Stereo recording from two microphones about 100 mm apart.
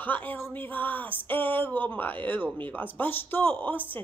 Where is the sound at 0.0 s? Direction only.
15° left (ahead or behind).